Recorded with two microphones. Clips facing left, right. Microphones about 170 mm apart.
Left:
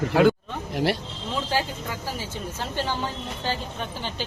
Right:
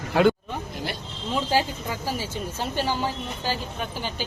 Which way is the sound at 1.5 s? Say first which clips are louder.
Right 3 dB; 20° right (ahead or behind).